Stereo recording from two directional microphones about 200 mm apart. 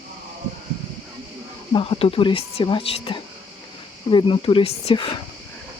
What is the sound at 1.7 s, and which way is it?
Speech, 25° left (ahead or behind).